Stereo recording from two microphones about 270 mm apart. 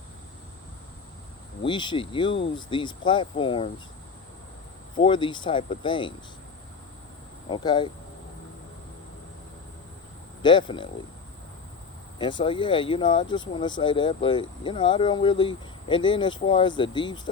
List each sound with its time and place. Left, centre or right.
1.6 s speech: centre
4.9 s speech: centre
7.4 s speech: centre
10.4 s speech: centre
12.2 s speech: centre